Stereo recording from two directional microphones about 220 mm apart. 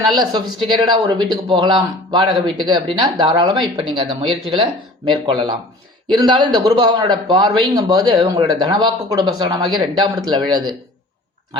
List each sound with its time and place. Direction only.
0.1 s a man's voice: 20° right (ahead or behind)